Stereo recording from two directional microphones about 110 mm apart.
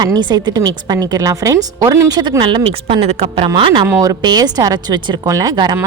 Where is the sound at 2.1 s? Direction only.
40° right (ahead or behind).